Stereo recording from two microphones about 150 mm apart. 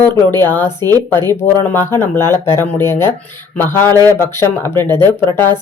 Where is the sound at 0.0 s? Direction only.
15° left (ahead or behind).